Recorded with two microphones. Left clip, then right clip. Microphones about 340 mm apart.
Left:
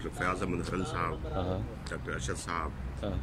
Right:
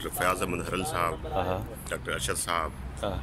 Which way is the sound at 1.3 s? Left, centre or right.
Right.